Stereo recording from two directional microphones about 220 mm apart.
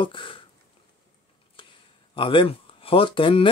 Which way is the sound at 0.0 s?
20° left (ahead or behind).